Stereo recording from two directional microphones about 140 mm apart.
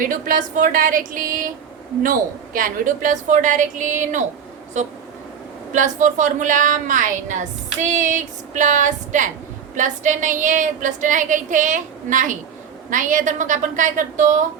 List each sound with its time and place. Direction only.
0.1 s a sound: 70° right (ahead or behind)
2.0 s speech: 80° right; by 4.2 s 60° right (ahead or behind)
5.7 s speech: 60° right (ahead or behind)